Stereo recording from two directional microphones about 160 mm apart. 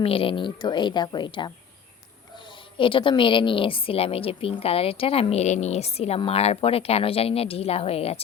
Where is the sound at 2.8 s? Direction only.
30° left (ahead or behind).